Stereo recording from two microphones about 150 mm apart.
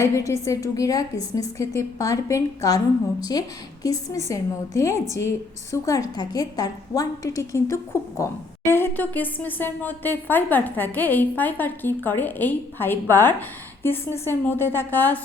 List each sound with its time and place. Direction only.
0.0 s a woman's voice: 20° left (ahead or behind)
4.3 s a woman's voice: 20° left (ahead or behind)